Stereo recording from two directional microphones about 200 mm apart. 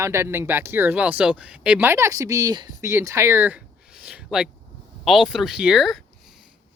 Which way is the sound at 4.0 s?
5° right (ahead or behind).